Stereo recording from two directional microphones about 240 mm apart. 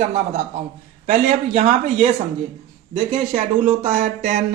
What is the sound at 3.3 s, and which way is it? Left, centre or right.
A man's voice, right.